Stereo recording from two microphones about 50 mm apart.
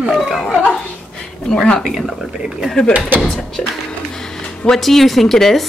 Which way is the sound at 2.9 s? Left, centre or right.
Right.